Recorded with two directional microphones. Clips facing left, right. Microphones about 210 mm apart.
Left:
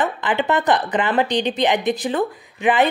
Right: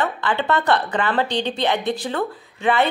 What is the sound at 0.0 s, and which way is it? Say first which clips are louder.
A woman's voice: left 2 dB; 15° left (ahead or behind).